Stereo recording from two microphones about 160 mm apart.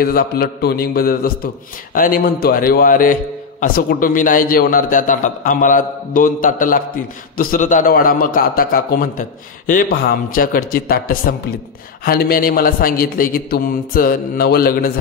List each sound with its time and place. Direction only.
0.0 s a man's voice: 65° left (ahead or behind)